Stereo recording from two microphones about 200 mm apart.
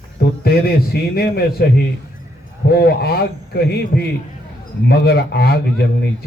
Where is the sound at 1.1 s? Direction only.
50° left (ahead or behind).